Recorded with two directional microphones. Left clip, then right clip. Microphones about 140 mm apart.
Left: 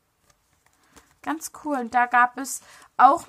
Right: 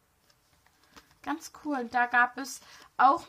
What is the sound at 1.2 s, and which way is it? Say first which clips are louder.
A woman's voice: left 6 dB; 50° left (ahead or behind).